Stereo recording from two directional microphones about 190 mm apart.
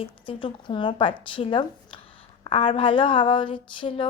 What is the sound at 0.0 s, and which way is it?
A woman's voice, 25° left (ahead or behind).